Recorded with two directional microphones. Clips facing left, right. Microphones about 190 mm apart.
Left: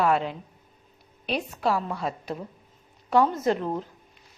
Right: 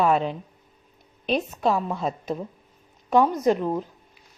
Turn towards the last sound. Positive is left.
turn(degrees=-15)  # may be behind; listen again after turning